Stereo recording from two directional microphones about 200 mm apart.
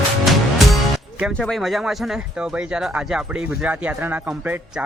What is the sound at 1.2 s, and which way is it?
Speech, centre (ahead or behind).